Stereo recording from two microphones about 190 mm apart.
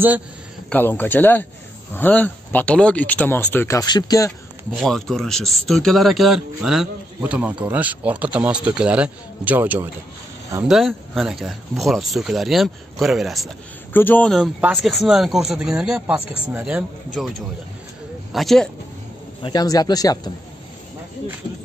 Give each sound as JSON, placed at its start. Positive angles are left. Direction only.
{"t": 0.7, "sound": "speech", "side_deg": 10}
{"t": 4.7, "sound": "a man's voice", "side_deg": 0}
{"t": 10.7, "sound": "a man's voice", "side_deg": 0}
{"t": 18.3, "sound": "a man's voice", "side_deg": 0}
{"t": 19.4, "sound": "a man's voice", "side_deg": 20}